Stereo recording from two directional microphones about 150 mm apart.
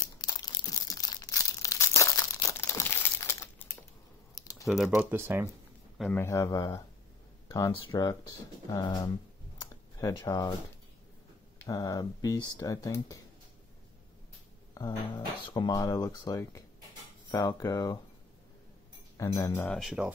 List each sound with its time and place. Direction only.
0.2 s a sound: 25° left (ahead or behind)
4.4 s typing: 25° left (ahead or behind)
4.6 s speech: centre (ahead or behind)
4.9 s speech: 15° right (ahead or behind)
6.1 s speech: 20° left (ahead or behind)
9.7 s a sound: 25° left (ahead or behind)
11.5 s speech: 25° left (ahead or behind)
14.7 s speech: 25° left (ahead or behind)
19.1 s speech: 20° left (ahead or behind)
19.8 s speech: 5° right (ahead or behind)